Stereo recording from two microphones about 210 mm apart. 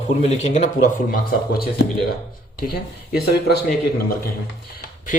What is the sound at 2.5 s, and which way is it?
Speech, 45° left (ahead or behind).